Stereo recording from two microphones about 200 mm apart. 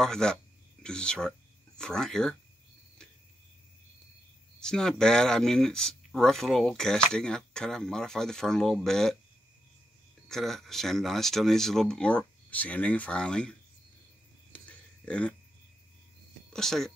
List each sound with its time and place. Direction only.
0.0 s speech: 5° left (ahead or behind)
4.6 s speech: 5° left (ahead or behind)
10.2 s speech: centre (ahead or behind)
14.5 s a sound: 5° left (ahead or behind)
16.5 s speech: centre (ahead or behind)